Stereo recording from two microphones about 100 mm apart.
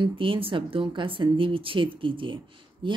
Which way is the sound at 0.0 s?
60° right (ahead or behind).